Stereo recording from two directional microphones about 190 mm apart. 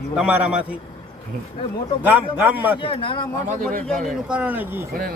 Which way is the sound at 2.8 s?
25° left (ahead or behind).